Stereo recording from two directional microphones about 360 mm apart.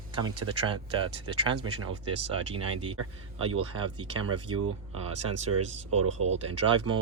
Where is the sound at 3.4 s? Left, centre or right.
Right.